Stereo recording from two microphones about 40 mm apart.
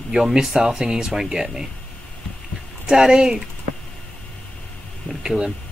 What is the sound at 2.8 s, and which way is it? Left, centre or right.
Speech, centre.